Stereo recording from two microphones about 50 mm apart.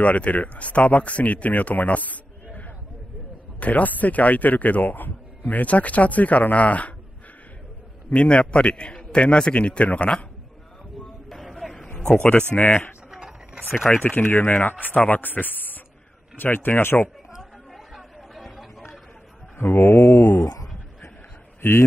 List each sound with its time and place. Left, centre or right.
0.0 s speech: left
3.5 s speech: left
8.1 s speech: centre
11.2 s vehicle: centre
12.2 s speech: left
13.9 s speech: left
17.4 s chatter: centre
19.6 s speech: left
19.9 s speech: left
21.5 s a man's voice: left